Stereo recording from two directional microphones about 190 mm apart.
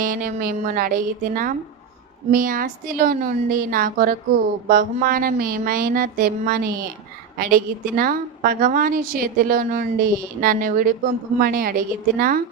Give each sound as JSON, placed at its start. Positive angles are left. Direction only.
{"t": 0.0, "sound": "a woman's voice", "side_deg": -45}